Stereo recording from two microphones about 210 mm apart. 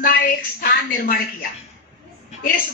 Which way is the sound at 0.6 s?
45° left (ahead or behind).